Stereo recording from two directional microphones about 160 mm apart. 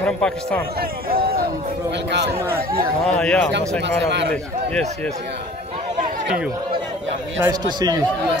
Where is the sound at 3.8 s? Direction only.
90° right.